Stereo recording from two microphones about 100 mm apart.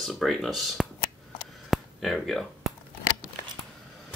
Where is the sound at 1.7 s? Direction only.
Centre (ahead or behind).